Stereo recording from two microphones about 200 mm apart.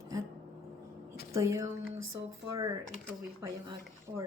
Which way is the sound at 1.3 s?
15° right (ahead or behind).